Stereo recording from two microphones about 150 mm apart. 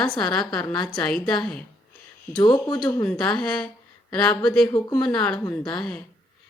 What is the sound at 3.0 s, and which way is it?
A woman's voice, 5° left (ahead or behind).